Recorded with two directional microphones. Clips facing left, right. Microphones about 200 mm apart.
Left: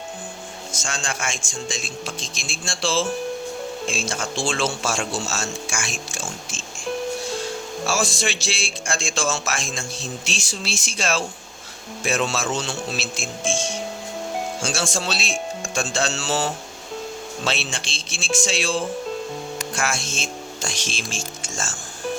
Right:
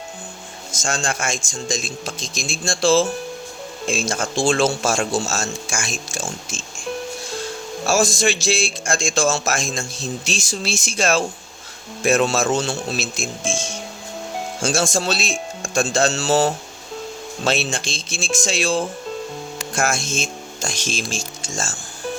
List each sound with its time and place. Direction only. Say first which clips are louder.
0.7 s speech: right 6 dB; 45° right (ahead or behind)
7.9 s speech: right 6 dB; 45° right (ahead or behind)
14.6 s speech: right 9 dB; 45° right (ahead or behind)